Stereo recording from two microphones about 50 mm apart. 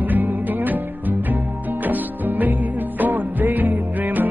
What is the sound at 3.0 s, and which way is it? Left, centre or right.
Music, right.